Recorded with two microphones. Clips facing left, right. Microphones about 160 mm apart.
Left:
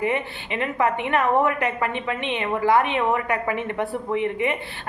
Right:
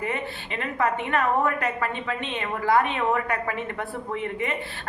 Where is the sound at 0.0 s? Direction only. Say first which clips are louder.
Left 5 dB; 15° left (ahead or behind).